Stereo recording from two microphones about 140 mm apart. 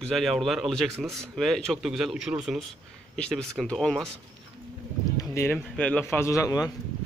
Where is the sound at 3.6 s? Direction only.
5° left (ahead or behind).